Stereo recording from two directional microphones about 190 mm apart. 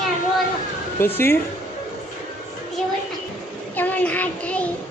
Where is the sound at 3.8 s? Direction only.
10° left (ahead or behind).